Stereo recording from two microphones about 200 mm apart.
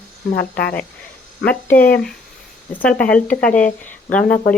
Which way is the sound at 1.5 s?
10° left (ahead or behind).